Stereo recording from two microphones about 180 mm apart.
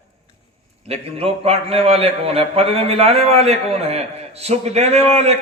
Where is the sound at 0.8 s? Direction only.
35° right (ahead or behind).